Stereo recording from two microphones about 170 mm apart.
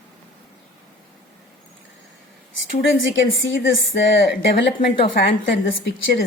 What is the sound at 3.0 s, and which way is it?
Speech, 90° left.